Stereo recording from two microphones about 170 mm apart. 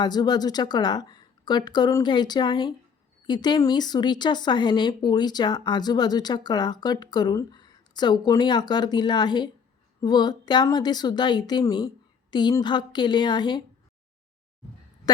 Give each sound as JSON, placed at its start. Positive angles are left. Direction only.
{"t": 0.0, "sound": "a woman's voice", "side_deg": 25}
{"t": 15.1, "sound": "a woman's voice", "side_deg": 25}